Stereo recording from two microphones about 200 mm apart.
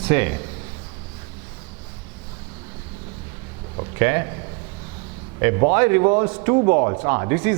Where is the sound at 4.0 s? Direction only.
15° right (ahead or behind).